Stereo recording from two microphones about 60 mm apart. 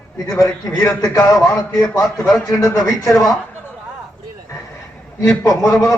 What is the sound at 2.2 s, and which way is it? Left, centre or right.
Speech, centre.